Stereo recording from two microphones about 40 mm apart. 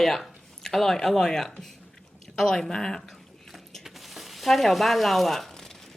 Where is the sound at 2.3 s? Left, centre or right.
Centre.